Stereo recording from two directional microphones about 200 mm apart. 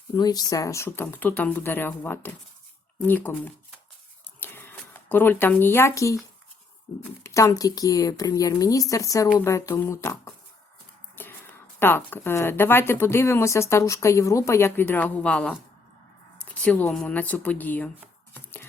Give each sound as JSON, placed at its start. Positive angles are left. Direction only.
{"t": 0.2, "sound": "speech", "side_deg": 20}
{"t": 4.4, "sound": "a sound", "side_deg": 10}
{"t": 7.2, "sound": "speech", "side_deg": 15}
{"t": 11.2, "sound": "a sound", "side_deg": 10}
{"t": 11.8, "sound": "speech", "side_deg": 10}
{"t": 16.6, "sound": "speech", "side_deg": 5}